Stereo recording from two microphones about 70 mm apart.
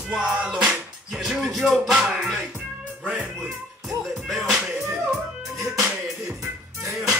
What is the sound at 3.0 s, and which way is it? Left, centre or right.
Speech, centre.